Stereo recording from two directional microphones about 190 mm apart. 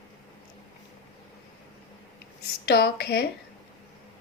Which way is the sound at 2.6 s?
60° left (ahead or behind).